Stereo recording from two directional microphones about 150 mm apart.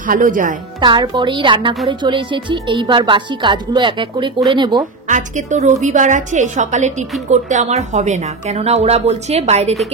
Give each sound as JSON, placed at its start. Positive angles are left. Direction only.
{"t": 0.0, "sound": "speech", "side_deg": -60}
{"t": 0.7, "sound": "speech", "side_deg": -30}
{"t": 5.0, "sound": "a woman's voice", "side_deg": -55}